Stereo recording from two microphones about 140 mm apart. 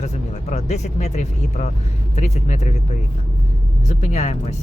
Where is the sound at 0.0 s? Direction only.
55° left (ahead or behind).